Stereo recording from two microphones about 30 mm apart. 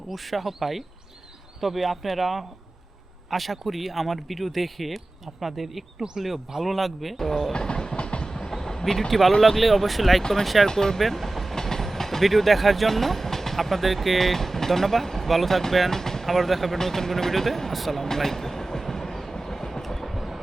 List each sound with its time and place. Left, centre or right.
0.1 s speech: centre
7.5 s train: left
7.9 s train: left
8.2 s train: left; by 9.3 s centre
9.4 s speech: centre
10.7 s speech: centre
11.0 s speech: centre
11.5 s speech: centre
16.7 s speech: centre
18.0 s train: centre
20.1 s a sound: centre